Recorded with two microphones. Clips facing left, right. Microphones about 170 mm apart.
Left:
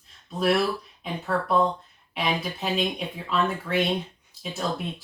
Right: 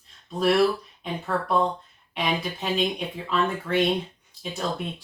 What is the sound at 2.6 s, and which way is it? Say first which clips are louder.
Speech: right 1 dB; centre (ahead or behind).